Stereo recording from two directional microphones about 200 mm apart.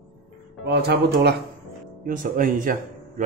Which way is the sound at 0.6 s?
55° right (ahead or behind).